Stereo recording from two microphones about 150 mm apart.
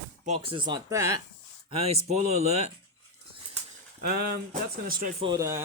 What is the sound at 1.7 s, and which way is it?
Speech, 45° right (ahead or behind).